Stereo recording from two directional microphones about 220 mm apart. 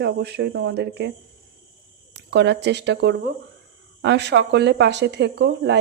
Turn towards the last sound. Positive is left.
turn(degrees=-50)  # may be behind; listen again after turning